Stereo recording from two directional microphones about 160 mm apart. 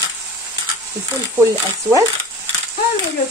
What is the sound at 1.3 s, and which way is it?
Speech, 20° right (ahead or behind).